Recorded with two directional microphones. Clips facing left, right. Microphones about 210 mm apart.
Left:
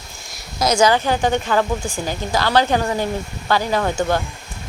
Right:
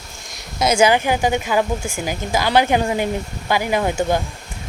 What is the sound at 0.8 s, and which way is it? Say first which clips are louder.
Speech: even; 15° right (ahead or behind).